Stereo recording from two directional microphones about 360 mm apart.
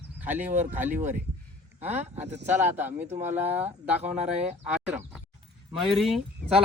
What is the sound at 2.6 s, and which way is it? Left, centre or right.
Speech, centre.